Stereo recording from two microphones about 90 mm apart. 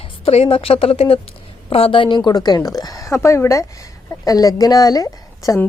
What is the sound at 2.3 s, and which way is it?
Speech, 45° left (ahead or behind).